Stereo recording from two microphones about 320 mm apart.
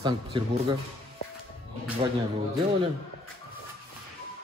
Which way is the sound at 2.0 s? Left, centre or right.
Centre.